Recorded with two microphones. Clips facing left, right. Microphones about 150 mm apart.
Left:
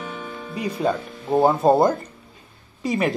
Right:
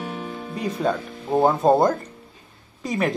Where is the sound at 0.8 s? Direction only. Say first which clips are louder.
Left 2 dB; 5° left (ahead or behind).